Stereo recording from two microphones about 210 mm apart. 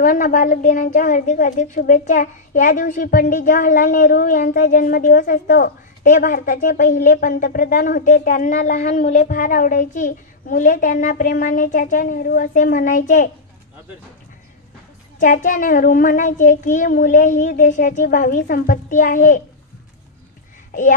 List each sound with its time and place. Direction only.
0.0 s a woman's voice: 40° left (ahead or behind)
15.1 s a woman's voice: 40° left (ahead or behind)